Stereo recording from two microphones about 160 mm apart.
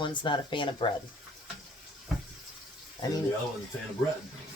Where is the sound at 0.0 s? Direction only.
30° left (ahead or behind).